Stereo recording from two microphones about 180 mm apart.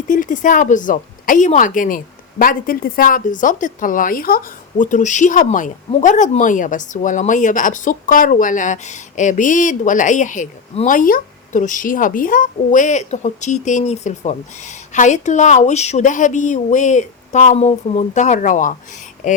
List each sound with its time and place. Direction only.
0.1 s speech: 45° left (ahead or behind)